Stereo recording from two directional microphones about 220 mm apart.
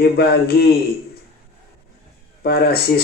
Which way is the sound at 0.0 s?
45° left (ahead or behind).